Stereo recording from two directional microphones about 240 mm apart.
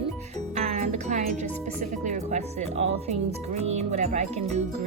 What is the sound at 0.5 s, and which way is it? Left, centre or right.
Music, right.